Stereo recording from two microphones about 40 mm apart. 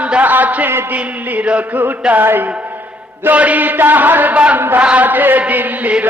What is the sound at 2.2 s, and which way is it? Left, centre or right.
Chant, right.